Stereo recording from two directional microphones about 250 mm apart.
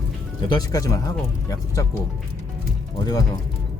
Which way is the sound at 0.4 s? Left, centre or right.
Centre.